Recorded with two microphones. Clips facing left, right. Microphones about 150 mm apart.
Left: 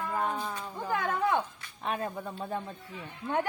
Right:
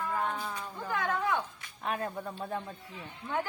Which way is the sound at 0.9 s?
40° left (ahead or behind).